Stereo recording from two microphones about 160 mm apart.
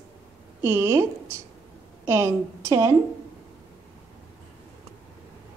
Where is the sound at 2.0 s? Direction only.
15° right (ahead or behind).